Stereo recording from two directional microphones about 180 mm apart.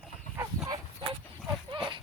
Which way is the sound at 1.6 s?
25° right (ahead or behind).